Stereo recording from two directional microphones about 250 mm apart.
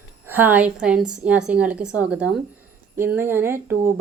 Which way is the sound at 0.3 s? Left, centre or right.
Centre.